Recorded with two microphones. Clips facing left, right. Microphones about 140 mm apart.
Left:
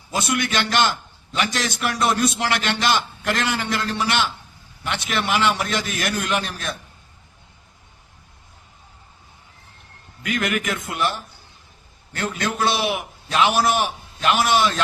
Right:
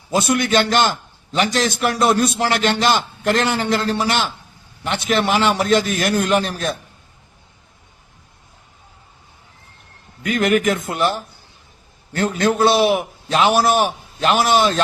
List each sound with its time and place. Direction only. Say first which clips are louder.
0.1 s a man's voice: right 6 dB; 35° right (ahead or behind)
10.2 s a man's voice: right 7 dB; 35° right (ahead or behind)